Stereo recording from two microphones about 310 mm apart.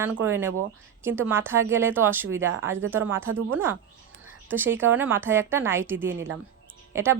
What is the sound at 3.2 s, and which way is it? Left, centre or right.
Speech, right.